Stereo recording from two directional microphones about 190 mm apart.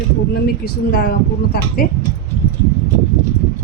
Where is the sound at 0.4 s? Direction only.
55° left (ahead or behind).